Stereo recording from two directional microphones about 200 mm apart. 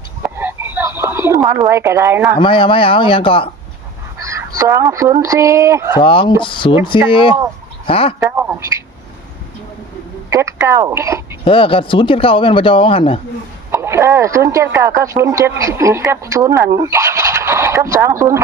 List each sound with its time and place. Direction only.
0.3 s a sound: 10° right (ahead or behind)
2.4 s speech: 25° left (ahead or behind)
4.2 s fowl: 15° right (ahead or behind)
5.2 s speech: 15° right (ahead or behind)
6.0 s speech: 25° left (ahead or behind)
10.2 s a sound: 15° right (ahead or behind)
11.4 s speech: 25° left (ahead or behind)
13.7 s speech: 15° right (ahead or behind)